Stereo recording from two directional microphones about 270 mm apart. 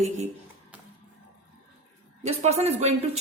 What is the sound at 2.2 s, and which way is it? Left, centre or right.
Speech, right.